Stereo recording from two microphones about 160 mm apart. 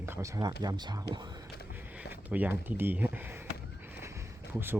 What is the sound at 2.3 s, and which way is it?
Speech, 10° right (ahead or behind).